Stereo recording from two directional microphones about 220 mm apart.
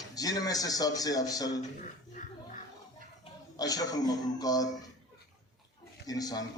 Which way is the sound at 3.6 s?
15° left (ahead or behind).